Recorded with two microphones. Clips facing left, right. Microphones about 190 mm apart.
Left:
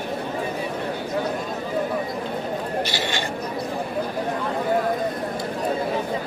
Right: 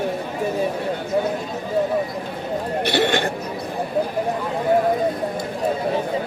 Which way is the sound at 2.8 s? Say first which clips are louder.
Right 8 dB; 60° right (ahead or behind).